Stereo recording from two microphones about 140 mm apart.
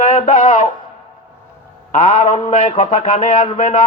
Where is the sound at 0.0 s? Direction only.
60° left (ahead or behind).